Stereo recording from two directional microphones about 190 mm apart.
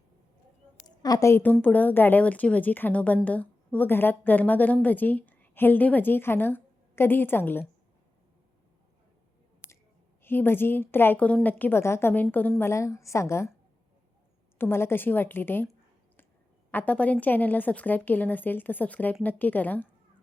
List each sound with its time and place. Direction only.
0.9 s a woman's voice: 20° left (ahead or behind)
10.2 s a woman's voice: 10° left (ahead or behind)
14.6 s a woman's voice: 10° left (ahead or behind)
16.7 s a woman's voice: 10° left (ahead or behind)